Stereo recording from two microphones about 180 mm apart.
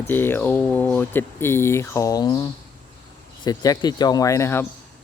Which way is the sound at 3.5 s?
20° left (ahead or behind).